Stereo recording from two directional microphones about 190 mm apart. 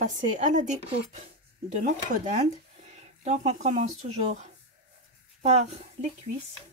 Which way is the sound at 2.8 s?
35° right (ahead or behind).